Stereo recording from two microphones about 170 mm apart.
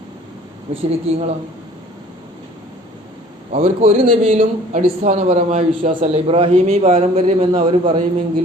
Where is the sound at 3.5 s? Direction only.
40° right (ahead or behind).